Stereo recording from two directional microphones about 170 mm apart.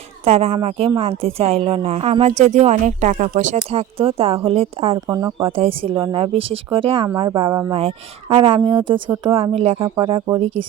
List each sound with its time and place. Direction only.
0.3 s a woman's voice: 40° right (ahead or behind)
4.9 s speech: 20° right (ahead or behind)
5.5 s a woman's voice: 30° right (ahead or behind)